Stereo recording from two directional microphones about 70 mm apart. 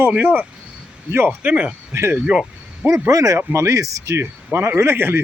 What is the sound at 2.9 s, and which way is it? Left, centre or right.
Speech, right.